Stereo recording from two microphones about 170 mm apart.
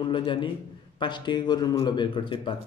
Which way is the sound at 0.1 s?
30° left (ahead or behind).